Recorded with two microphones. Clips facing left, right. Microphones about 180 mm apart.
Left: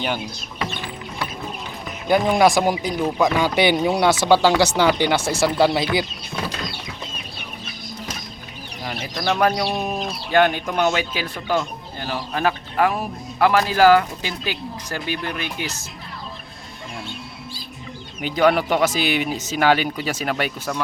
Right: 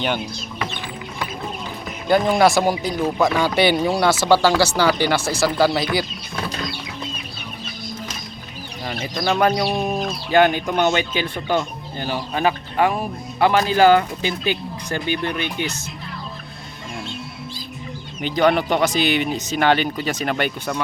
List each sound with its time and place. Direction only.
2.0 s speech: 15° left (ahead or behind)
8.8 s speech: centre (ahead or behind)
18.2 s speech: 5° left (ahead or behind)